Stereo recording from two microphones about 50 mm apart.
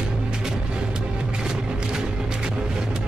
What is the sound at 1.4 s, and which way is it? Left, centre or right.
Music, centre.